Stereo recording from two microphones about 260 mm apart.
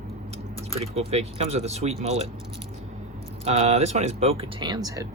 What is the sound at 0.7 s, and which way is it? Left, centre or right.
Speech, right.